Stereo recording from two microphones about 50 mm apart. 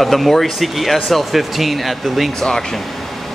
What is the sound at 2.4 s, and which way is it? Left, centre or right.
Speech, centre.